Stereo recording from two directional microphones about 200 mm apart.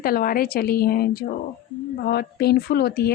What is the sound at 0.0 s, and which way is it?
A woman's voice, 45° left (ahead or behind).